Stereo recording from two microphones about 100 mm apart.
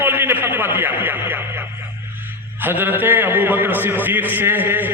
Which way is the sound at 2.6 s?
20° right (ahead or behind).